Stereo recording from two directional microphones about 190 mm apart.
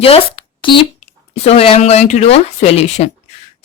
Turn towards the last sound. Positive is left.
turn(degrees=35)  # may be behind; listen again after turning